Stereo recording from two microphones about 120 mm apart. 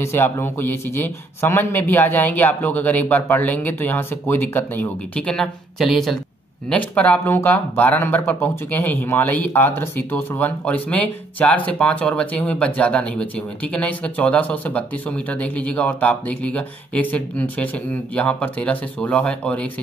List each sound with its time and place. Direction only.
0.0 s speech: 20° left (ahead or behind); by 6.1 s centre (ahead or behind)
6.7 s speech: 15° left (ahead or behind)